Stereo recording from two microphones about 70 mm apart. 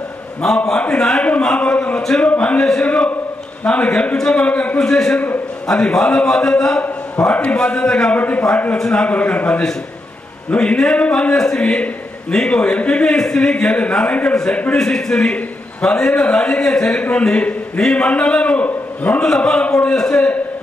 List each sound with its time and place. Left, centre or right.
0.7 s a man's voice: centre
4.7 s a man's voice: centre
8.7 s a man's voice: centre
9.0 s a man's voice: centre
19.2 s a man's voice: centre
19.6 s a man's voice: centre